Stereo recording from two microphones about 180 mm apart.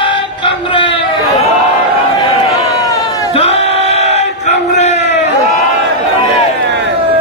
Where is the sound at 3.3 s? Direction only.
35° left (ahead or behind).